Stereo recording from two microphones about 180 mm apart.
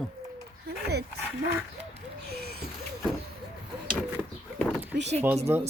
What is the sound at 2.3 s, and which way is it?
Speech, 60° right (ahead or behind).